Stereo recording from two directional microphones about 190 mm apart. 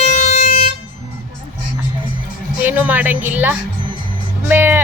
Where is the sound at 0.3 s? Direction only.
45° left (ahead or behind).